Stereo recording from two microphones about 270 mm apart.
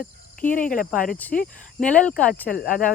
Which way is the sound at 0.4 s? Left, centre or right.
Left.